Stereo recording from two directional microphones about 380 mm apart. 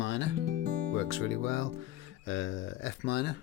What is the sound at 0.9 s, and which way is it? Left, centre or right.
Speech, left.